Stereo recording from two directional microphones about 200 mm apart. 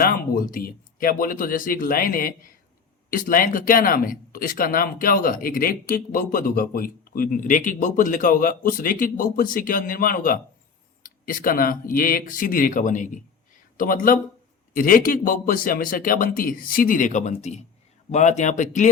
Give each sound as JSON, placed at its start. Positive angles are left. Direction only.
{"t": 0.0, "sound": "speech", "side_deg": 45}